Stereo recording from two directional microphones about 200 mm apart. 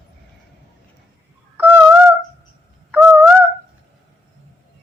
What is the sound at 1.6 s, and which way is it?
Fowl, 10° right (ahead or behind).